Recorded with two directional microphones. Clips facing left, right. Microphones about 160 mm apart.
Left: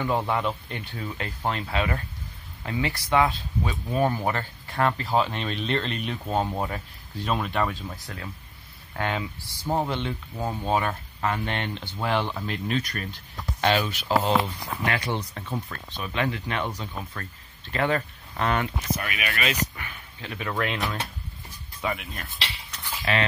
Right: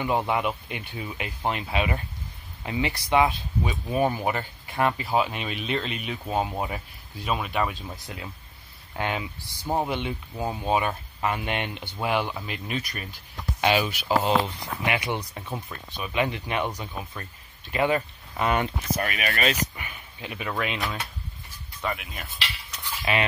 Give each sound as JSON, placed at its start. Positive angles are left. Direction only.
{"t": 0.0, "sound": "speech", "side_deg": -15}
{"t": 18.9, "sound": "speech", "side_deg": -40}
{"t": 19.8, "sound": "speech", "side_deg": -15}
{"t": 21.8, "sound": "speech", "side_deg": 0}